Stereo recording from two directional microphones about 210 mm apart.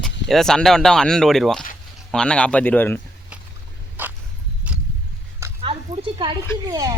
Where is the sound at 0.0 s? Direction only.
Centre (ahead or behind).